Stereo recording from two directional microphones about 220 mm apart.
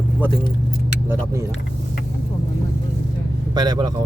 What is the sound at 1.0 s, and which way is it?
Speech, 15° right (ahead or behind).